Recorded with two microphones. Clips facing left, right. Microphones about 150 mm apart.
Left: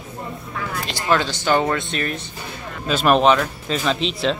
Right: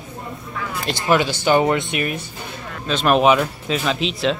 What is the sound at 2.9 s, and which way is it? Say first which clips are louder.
Speech: left 1 dB; 5° left (ahead or behind).